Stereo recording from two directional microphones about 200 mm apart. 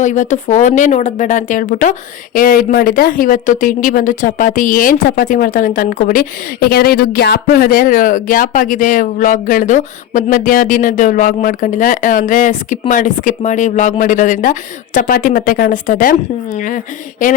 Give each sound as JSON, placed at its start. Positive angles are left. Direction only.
{"t": 0.0, "sound": "speech", "side_deg": 35}